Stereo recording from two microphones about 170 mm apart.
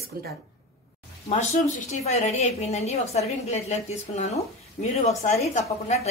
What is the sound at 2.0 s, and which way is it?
A woman's voice, 40° left (ahead or behind).